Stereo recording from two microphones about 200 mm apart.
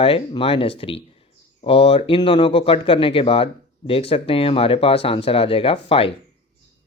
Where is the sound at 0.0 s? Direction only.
30° left (ahead or behind).